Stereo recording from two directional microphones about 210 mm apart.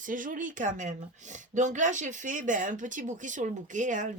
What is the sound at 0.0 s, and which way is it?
Speech, 40° right (ahead or behind).